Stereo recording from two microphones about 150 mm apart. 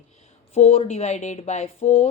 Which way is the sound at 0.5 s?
45° left (ahead or behind).